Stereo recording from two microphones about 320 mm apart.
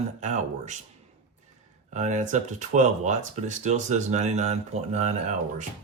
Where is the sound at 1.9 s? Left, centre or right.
Right.